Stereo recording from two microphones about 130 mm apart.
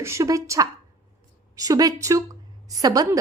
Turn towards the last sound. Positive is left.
turn(degrees=-30)  # may be behind; listen again after turning